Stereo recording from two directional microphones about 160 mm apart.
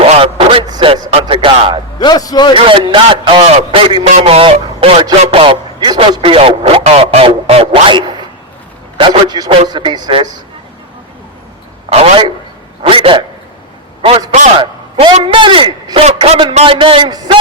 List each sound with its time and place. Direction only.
0.0 s a sound: 35° right (ahead or behind)
2.0 s a man's voice: 25° left (ahead or behind)
2.6 s a man's voice: 30° right (ahead or behind)
11.9 s a man's voice: 40° right (ahead or behind)
14.6 s a sound: 30° right (ahead or behind)
15.1 s a man's voice: 30° right (ahead or behind)